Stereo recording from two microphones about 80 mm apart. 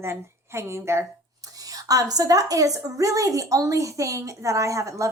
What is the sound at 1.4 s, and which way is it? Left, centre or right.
A woman's voice, right.